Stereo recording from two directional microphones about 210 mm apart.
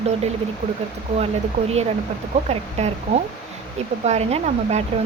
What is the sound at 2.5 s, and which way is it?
Speech, 30° right (ahead or behind).